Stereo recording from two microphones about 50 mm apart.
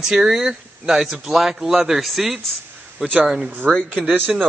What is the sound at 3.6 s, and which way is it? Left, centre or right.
Speech, right.